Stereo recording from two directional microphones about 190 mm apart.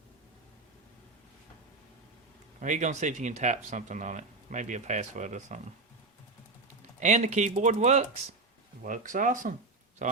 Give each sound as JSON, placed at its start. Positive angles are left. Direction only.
{"t": 2.6, "sound": "speech", "side_deg": -40}
{"t": 7.0, "sound": "speech", "side_deg": -40}